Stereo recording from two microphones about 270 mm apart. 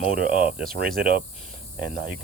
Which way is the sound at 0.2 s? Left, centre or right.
Right.